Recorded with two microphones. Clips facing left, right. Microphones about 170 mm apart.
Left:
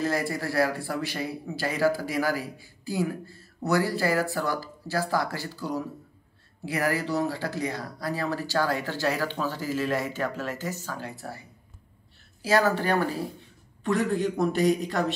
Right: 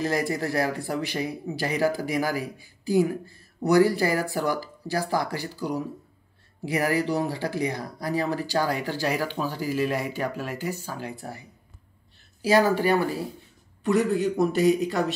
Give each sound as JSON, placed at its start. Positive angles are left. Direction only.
{"t": 0.0, "sound": "speech", "side_deg": -15}
{"t": 13.8, "sound": "a man's voice", "side_deg": -5}